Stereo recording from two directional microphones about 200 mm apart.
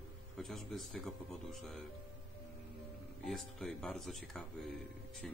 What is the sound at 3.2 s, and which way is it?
Speech, 5° left (ahead or behind).